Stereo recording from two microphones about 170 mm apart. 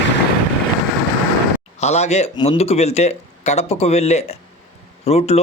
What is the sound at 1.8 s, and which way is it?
Speech, 40° left (ahead or behind).